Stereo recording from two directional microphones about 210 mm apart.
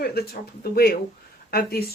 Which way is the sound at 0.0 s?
45° left (ahead or behind).